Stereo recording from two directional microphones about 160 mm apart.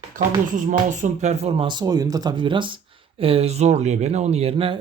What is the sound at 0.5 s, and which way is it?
Speech, 55° right (ahead or behind).